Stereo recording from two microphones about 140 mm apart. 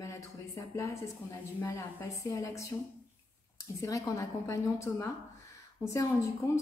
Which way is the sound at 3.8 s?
25° left (ahead or behind).